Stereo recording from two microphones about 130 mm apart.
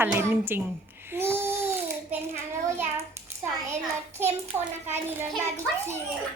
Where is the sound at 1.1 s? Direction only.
20° right (ahead or behind).